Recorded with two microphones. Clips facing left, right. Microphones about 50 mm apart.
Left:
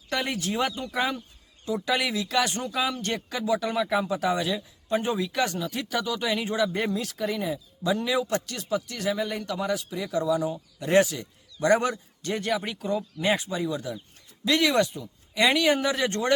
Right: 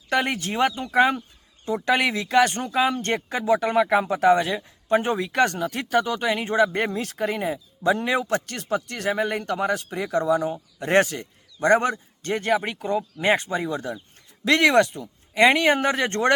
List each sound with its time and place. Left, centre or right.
0.1 s speech: right
13.3 s speech: right